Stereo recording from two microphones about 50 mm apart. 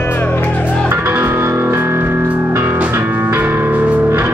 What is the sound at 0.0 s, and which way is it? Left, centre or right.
Music, left.